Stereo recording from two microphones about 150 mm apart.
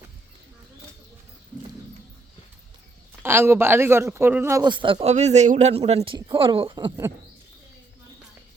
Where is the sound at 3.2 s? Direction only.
15° right (ahead or behind).